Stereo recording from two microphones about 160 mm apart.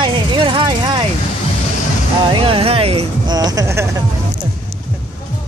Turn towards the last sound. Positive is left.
turn(degrees=-20)  # may be behind; listen again after turning